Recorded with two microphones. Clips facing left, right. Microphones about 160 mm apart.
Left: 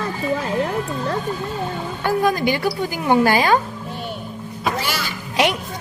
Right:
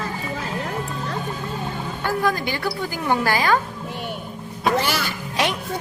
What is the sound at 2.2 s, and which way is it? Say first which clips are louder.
A woman's voice: left 5 dB; 20° left (ahead or behind).